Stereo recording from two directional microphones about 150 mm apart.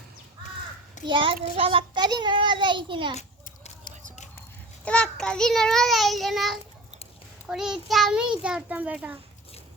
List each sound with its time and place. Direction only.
1.0 s a child's voice: 35° right (ahead or behind)
3.8 s a sound: 50° left (ahead or behind)
4.9 s a child's voice: 5° left (ahead or behind)